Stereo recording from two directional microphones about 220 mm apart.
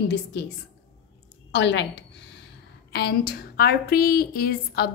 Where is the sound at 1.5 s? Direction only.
55° left (ahead or behind).